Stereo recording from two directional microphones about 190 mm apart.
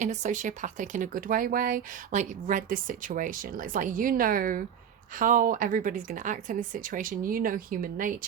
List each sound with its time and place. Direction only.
0.0 s speech: 40° right (ahead or behind)